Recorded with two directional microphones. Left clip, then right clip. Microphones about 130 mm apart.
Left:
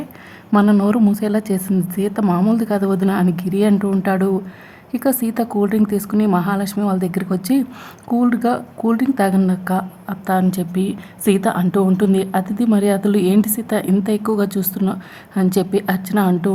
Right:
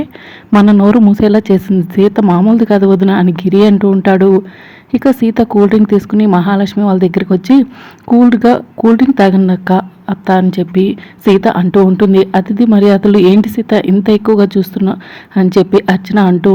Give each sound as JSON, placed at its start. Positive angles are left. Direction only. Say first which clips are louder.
{"t": 0.5, "sound": "a woman's voice", "louder": "right 8 dB", "side_deg": -25}
{"t": 2.2, "sound": "speech", "louder": "right 8 dB", "side_deg": -15}
{"t": 2.6, "sound": "a woman's voice", "louder": "right 10 dB", "side_deg": -25}